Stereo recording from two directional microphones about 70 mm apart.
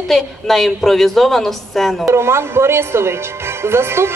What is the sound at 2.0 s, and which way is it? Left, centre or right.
Speech, right.